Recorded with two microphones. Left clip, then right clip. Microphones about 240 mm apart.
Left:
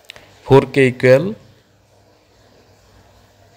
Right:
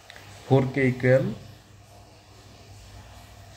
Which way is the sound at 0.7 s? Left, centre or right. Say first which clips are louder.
Left 10 dB; left.